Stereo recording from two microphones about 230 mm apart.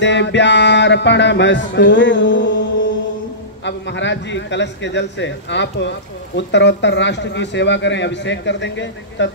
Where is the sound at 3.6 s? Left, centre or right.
Left.